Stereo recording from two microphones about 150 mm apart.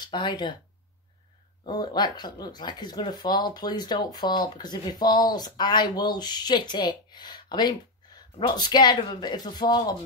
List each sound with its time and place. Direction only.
0.0 s speech: 30° left (ahead or behind)
1.7 s speech: 30° left (ahead or behind)